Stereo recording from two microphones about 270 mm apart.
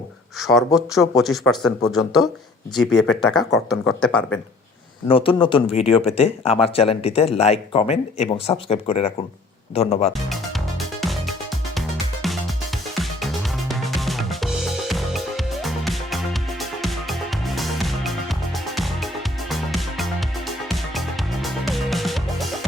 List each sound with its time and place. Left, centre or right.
0.3 s speech: centre
5.0 s speech: centre
10.8 s music: centre
13.7 s music: centre
21.4 s music: centre